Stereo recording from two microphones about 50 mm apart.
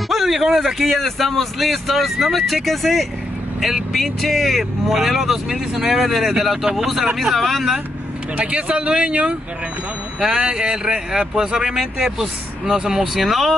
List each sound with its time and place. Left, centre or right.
0.1 s speech: centre
6.6 s speech: centre
7.2 s speech: centre
8.4 s speech: right
10.2 s speech: centre